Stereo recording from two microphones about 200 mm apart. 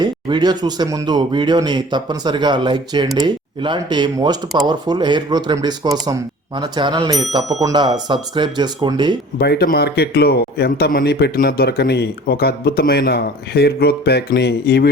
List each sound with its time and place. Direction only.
0.0 s speech: 20° right (ahead or behind)
9.4 s a man's voice: 55° left (ahead or behind)